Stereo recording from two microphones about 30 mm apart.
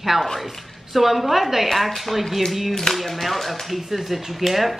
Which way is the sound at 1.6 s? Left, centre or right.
Centre.